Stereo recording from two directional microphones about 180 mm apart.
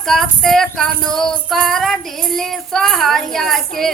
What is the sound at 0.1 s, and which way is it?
Child singing, centre (ahead or behind).